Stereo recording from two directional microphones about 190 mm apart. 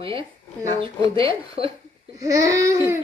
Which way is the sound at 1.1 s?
30° right (ahead or behind).